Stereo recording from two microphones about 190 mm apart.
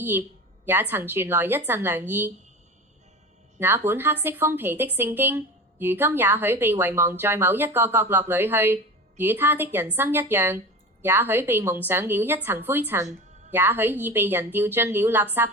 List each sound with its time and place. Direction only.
0.0 s speech: 10° right (ahead or behind)
3.6 s speech: 10° right (ahead or behind)